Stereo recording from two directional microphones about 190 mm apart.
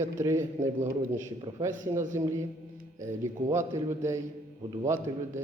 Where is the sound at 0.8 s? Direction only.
40° right (ahead or behind).